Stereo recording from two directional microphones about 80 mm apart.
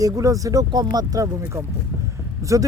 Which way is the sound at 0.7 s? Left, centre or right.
Right.